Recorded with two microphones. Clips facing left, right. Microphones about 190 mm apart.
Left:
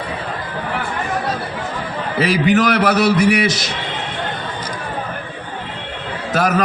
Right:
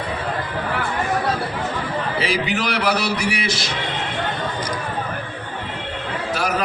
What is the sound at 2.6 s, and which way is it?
Speech, 50° left (ahead or behind).